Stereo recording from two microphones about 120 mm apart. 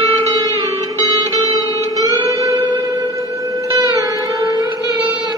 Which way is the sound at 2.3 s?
30° right (ahead or behind).